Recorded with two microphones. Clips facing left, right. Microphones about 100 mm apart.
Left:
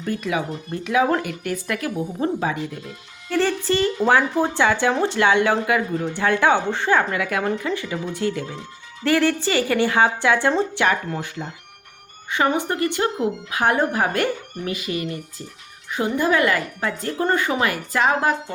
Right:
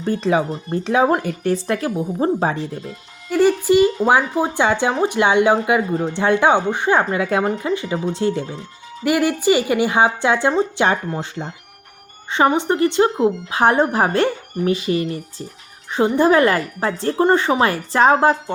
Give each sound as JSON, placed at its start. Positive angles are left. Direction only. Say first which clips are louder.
{"t": 0.0, "sound": "a woman's voice", "louder": "right 6 dB", "side_deg": -30}
{"t": 3.3, "sound": "a woman's voice", "louder": "right 6 dB", "side_deg": -10}
{"t": 4.6, "sound": "speech", "louder": "right 2 dB", "side_deg": -20}
{"t": 5.9, "sound": "a woman's voice", "louder": "right 4 dB", "side_deg": -35}
{"t": 6.1, "sound": "a woman's voice", "louder": "right 3 dB", "side_deg": -20}
{"t": 7.7, "sound": "speech", "louder": "right 5 dB", "side_deg": -20}
{"t": 9.0, "sound": "a woman's voice", "louder": "right 3 dB", "side_deg": -15}